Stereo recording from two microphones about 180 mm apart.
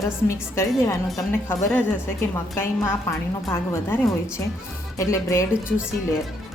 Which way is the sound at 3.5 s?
15° left (ahead or behind).